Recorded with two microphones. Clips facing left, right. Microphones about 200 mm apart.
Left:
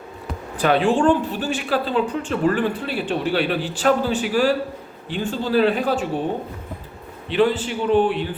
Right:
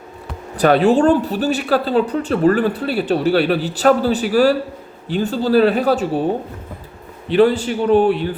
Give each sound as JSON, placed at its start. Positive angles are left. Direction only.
{"t": 0.6, "sound": "speech", "side_deg": -40}
{"t": 7.3, "sound": "speech", "side_deg": -40}